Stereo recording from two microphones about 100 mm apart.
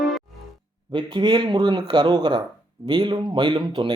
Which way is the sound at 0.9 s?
50° right (ahead or behind).